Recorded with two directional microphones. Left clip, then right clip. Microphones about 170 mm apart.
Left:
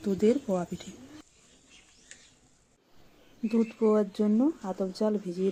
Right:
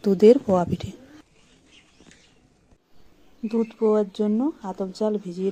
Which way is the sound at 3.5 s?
15° right (ahead or behind).